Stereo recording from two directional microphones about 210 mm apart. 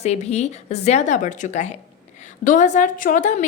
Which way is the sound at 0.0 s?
30° left (ahead or behind).